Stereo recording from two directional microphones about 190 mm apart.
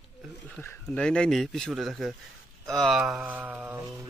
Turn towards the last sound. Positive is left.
turn(degrees=-10)  # may be behind; listen again after turning